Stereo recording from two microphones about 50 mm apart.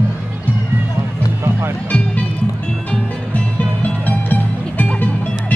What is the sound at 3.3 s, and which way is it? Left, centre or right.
Music, left.